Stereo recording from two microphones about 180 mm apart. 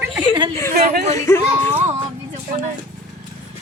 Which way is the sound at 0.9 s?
50° right (ahead or behind).